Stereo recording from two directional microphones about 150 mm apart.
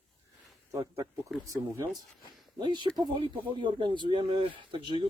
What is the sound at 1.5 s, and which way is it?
Speech, 20° right (ahead or behind).